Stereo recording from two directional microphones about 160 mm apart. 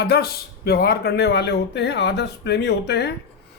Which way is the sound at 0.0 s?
80° left.